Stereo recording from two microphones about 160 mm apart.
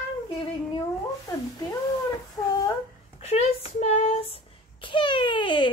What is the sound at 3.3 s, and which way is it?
Speech, 40° left (ahead or behind).